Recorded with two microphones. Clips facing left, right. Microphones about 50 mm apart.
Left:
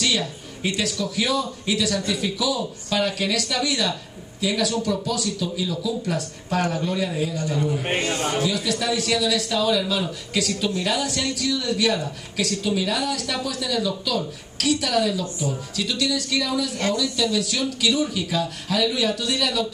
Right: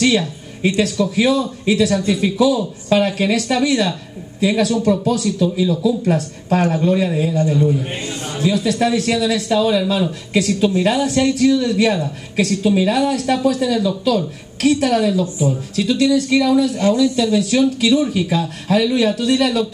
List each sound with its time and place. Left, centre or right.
0.0 s speech: right
7.8 s a man's voice: left
8.5 s speech: right